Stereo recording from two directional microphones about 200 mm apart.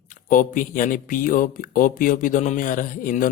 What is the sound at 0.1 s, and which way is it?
Speech, 40° left (ahead or behind).